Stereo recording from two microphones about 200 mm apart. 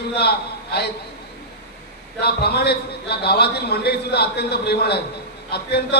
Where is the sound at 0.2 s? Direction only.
55° left (ahead or behind).